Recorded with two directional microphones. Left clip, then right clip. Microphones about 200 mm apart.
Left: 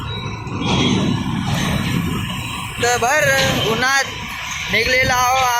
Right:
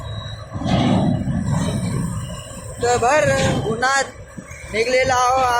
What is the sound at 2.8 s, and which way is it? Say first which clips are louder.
Speech: even; centre (ahead or behind).